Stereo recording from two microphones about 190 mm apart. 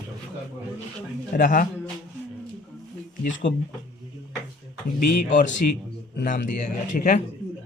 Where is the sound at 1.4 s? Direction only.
40° left (ahead or behind).